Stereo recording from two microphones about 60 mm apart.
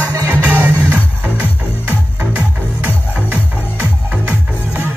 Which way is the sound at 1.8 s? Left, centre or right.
Right.